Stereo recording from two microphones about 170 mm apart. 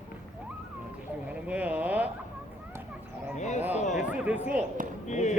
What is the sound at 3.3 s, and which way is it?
Speech, 45° left (ahead or behind).